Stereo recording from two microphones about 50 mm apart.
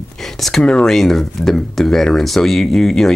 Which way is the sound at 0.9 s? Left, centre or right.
Centre.